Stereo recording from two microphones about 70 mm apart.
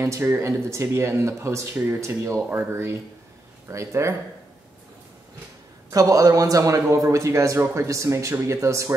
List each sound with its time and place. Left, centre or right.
0.2 s a man's voice: right
5.9 s a man's voice: right